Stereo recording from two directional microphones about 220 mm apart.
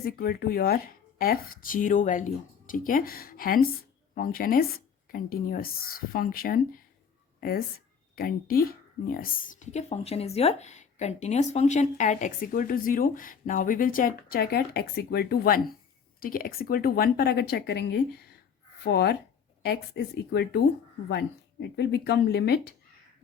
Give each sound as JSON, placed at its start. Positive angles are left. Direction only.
{"t": 0.0, "sound": "a woman's voice", "side_deg": 45}
{"t": 8.1, "sound": "a woman's voice", "side_deg": 45}